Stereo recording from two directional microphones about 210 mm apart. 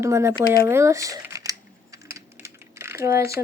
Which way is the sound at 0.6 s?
15° right (ahead or behind).